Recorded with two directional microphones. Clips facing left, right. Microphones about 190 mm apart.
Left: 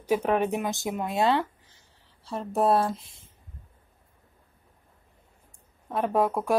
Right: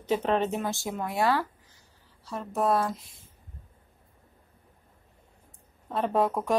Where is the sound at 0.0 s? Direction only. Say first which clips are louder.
Left 2 dB; 10° left (ahead or behind); by 3.3 s 25° left (ahead or behind).